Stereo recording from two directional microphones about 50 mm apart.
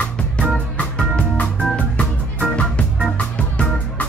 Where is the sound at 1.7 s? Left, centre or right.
Left.